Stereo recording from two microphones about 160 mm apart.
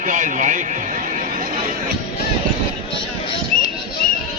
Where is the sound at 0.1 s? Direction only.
50° right (ahead or behind).